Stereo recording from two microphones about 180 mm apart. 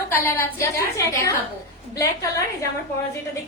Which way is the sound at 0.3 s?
15° left (ahead or behind).